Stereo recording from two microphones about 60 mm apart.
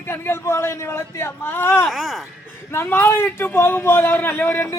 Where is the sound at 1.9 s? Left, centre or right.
Centre.